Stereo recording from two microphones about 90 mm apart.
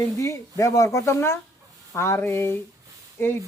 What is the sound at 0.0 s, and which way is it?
A man's voice, 35° left (ahead or behind).